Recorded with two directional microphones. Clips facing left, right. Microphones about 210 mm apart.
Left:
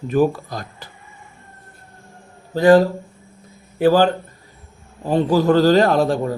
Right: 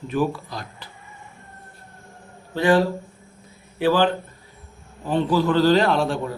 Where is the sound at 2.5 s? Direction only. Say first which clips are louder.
Left 6 dB; 40° left (ahead or behind).